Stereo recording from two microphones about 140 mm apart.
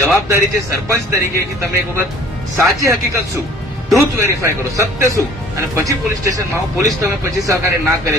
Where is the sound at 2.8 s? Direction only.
20° right (ahead or behind).